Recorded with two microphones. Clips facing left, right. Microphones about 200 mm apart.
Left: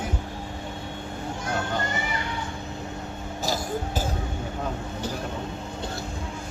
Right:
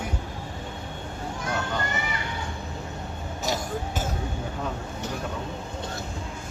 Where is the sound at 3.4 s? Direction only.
35° left (ahead or behind).